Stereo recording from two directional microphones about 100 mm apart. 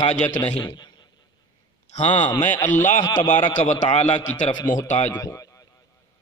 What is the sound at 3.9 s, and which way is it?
Speech, 90° left.